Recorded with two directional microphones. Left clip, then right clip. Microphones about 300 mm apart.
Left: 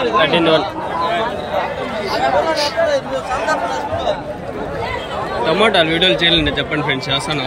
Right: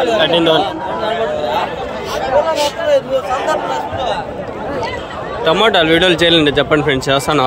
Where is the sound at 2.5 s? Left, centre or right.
Right.